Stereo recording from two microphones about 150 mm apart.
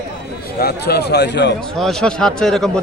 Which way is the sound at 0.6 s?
90° left.